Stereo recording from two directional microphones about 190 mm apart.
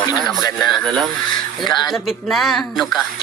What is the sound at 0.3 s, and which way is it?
Speech, centre (ahead or behind).